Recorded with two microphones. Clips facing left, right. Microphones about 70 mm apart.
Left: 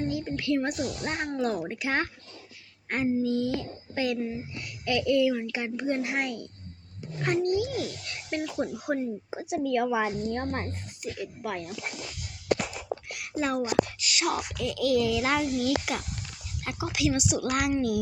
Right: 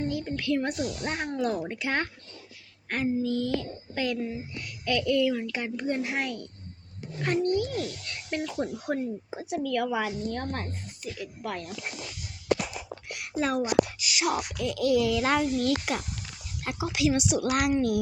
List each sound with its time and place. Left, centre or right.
0.0 s a sound: centre
1.0 s speech: centre
12.6 s whispering: centre
14.5 s speech: centre